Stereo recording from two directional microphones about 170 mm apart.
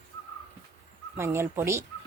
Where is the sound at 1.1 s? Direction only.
15° right (ahead or behind).